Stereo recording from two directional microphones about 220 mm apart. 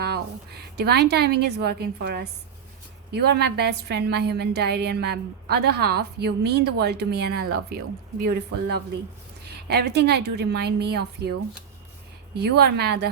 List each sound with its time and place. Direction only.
0.0 s a woman's voice: 45° right (ahead or behind)
12.4 s a woman's voice: 50° right (ahead or behind)